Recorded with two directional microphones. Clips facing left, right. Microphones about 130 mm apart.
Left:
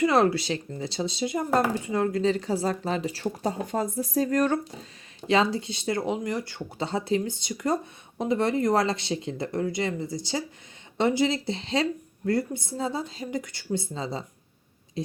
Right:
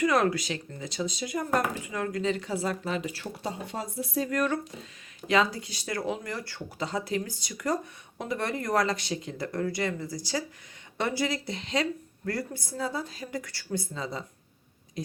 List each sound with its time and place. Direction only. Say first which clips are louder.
0.0 s speech: left 3 dB; 30° left (ahead or behind)